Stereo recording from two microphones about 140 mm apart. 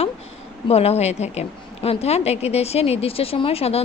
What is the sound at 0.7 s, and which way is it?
A woman's voice, 50° left (ahead or behind).